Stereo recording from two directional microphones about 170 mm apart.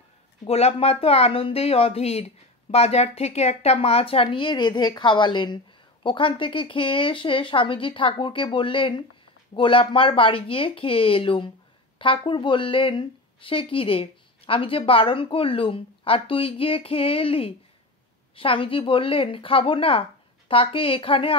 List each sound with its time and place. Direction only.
0.5 s speech: 40° left (ahead or behind)